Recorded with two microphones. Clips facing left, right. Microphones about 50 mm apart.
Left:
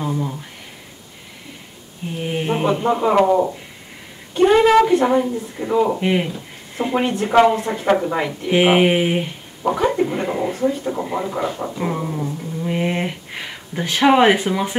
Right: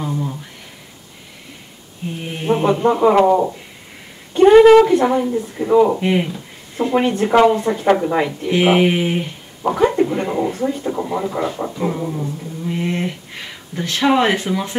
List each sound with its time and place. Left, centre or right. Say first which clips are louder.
0.0 s a sound: even; centre
2.2 s speech: right 2 dB; centre
7.1 s speech: right 3 dB; centre
7.3 s speech: right 1 dB; centre
8.5 s speech: left 1 dB; centre
9.7 s speech: right 2 dB; centre
10.0 s dog: right 2 dB; centre
10.6 s speech: even; centre